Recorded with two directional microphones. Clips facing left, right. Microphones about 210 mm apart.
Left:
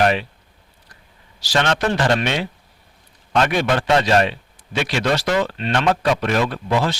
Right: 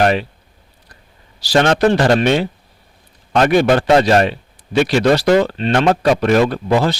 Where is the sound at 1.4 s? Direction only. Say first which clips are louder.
Right 7 dB; 35° right (ahead or behind).